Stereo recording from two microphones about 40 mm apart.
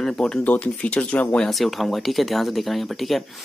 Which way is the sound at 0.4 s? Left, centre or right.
Left.